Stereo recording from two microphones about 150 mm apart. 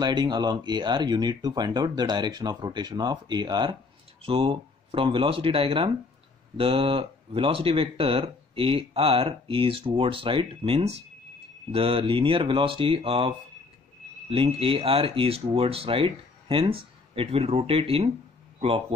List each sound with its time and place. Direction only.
0.0 s speech: 30° right (ahead or behind)
14.3 s speech: 40° right (ahead or behind)